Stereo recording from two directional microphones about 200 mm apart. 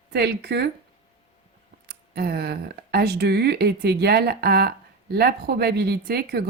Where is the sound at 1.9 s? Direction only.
55° right (ahead or behind).